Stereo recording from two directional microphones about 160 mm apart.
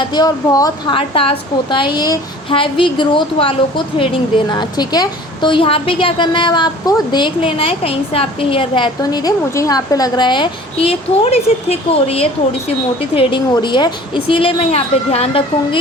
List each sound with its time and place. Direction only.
0.1 s speech: 25° left (ahead or behind)
0.9 s a woman's voice: 35° left (ahead or behind)